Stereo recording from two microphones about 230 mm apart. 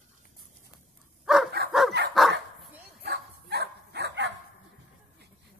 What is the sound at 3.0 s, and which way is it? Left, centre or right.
Dog, right.